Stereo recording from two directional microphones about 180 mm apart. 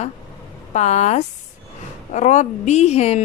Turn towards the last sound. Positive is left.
turn(degrees=35)  # may be behind; listen again after turning